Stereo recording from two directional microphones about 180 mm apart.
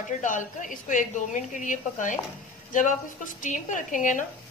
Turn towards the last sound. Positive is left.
turn(degrees=45)  # may be behind; listen again after turning